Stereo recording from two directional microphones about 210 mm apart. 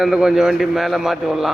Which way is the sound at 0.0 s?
5° right (ahead or behind).